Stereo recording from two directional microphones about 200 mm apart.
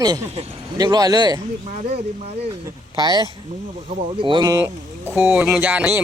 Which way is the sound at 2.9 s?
20° right (ahead or behind).